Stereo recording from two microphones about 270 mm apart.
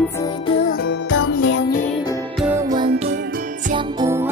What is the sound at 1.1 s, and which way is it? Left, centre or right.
Music, left.